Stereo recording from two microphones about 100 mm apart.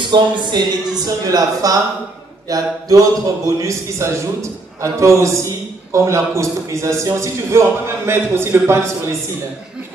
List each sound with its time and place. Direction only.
0.1 s a man's voice: 45° right (ahead or behind); by 8.9 s 25° right (ahead or behind)